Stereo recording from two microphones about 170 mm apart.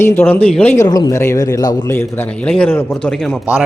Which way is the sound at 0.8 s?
25° left (ahead or behind).